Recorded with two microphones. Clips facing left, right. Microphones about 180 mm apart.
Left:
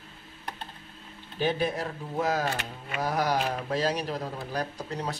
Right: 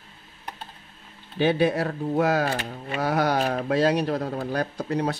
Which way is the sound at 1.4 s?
70° right (ahead or behind).